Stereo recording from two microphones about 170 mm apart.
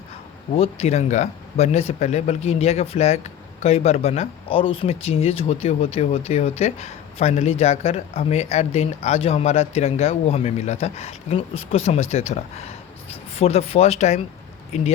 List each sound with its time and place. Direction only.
0.5 s speech: 35° left (ahead or behind)